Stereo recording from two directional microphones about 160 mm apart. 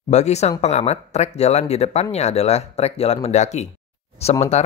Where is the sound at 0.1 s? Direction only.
45° left (ahead or behind).